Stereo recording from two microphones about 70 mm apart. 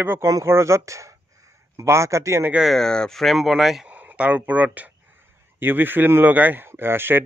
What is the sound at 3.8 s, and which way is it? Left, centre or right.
Speech, centre.